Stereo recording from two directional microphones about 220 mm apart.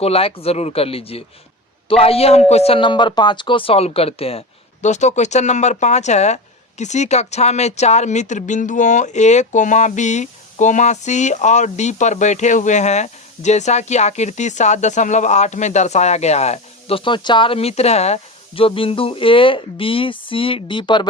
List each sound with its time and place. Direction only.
0.0 s speech: 25° left (ahead or behind)